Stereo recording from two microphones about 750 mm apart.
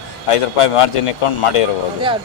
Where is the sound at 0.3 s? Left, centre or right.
Left.